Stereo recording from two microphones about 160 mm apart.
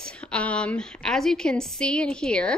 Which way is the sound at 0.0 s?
5° left (ahead or behind).